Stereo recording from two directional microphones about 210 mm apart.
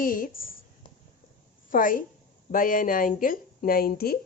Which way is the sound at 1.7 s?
40° left (ahead or behind).